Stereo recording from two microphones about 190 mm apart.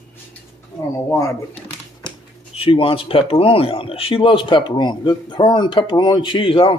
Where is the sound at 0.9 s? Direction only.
15° left (ahead or behind).